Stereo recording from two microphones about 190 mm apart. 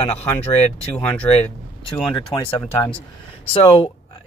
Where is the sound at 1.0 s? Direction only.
5° left (ahead or behind).